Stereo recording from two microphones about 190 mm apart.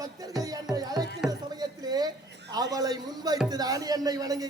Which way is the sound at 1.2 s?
5° right (ahead or behind).